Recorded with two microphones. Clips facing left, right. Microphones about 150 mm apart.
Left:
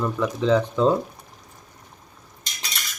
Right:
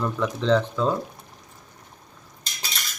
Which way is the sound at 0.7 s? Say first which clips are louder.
Left 5 dB; 20° left (ahead or behind).